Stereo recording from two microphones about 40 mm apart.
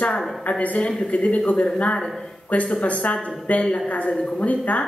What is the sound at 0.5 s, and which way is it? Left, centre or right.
Speech, left.